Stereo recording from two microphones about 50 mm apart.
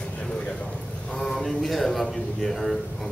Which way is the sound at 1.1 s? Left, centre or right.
Centre.